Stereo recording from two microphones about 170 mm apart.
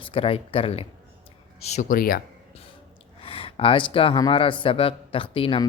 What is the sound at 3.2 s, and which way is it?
Speech, 35° left (ahead or behind).